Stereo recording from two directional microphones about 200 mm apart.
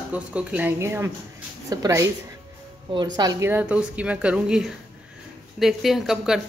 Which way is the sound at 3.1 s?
15° right (ahead or behind).